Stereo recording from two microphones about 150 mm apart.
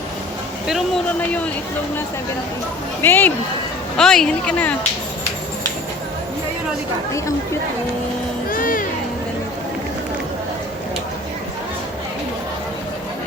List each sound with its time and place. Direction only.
3.0 s speech: 15° left (ahead or behind)
8.4 s music: 65° left (ahead or behind)